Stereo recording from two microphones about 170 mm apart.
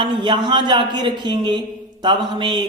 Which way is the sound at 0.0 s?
25° right (ahead or behind).